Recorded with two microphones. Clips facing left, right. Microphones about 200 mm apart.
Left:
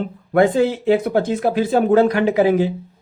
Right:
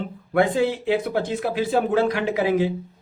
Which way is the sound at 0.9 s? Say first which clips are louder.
Left 6 dB; 45° left (ahead or behind).